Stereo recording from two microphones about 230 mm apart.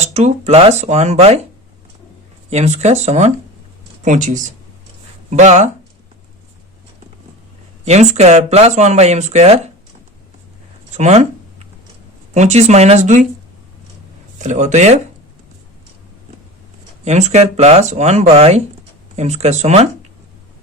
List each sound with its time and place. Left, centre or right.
0.0 s speech: right
2.5 s speech: right
7.9 s speech: right
10.9 s a sound: right
12.3 s speech: right
14.3 s speech: right
17.0 s speech: right